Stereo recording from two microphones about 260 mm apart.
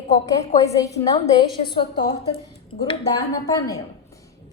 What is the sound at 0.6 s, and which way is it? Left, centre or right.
A woman's voice, centre.